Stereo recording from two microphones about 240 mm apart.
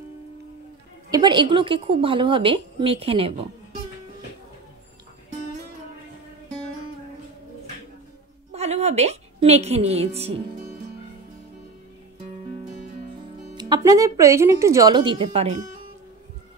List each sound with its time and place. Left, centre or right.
1.1 s a woman's voice: centre
8.5 s a woman's voice: right
13.6 s speech: centre